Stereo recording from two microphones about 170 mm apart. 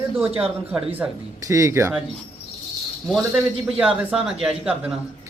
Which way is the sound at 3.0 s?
Centre (ahead or behind).